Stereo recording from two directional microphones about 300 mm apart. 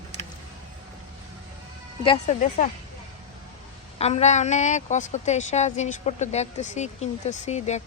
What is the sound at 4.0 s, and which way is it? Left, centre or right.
A woman's voice, left.